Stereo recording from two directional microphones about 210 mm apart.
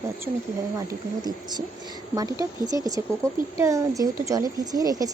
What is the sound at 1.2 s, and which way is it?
Speech, 20° right (ahead or behind).